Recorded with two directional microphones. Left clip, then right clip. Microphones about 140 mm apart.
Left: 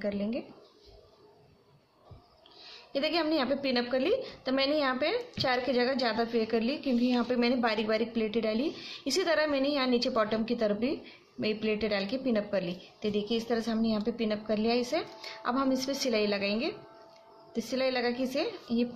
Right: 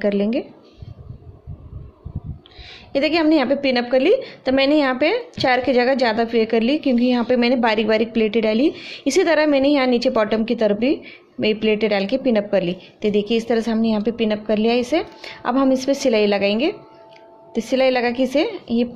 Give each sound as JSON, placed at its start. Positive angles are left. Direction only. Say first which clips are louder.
{"t": 0.0, "sound": "a woman's voice", "louder": "right 14 dB", "side_deg": -50}
{"t": 2.7, "sound": "a woman's voice", "louder": "right 11 dB", "side_deg": -45}